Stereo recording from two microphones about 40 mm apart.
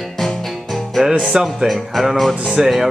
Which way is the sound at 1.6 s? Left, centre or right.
Centre.